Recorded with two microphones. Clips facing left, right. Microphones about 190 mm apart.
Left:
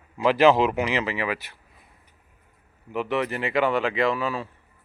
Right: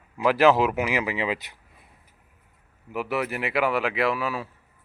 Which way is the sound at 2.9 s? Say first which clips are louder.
Left 2 dB; 5° right (ahead or behind).